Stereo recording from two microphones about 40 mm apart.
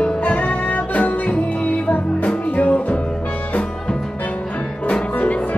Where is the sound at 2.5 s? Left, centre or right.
Left.